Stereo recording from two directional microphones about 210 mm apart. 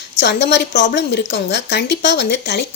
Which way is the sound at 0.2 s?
55° left (ahead or behind).